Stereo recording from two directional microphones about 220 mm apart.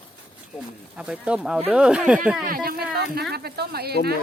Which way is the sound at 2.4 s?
40° right (ahead or behind).